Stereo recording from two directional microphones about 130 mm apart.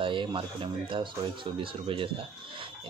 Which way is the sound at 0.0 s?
40° right (ahead or behind).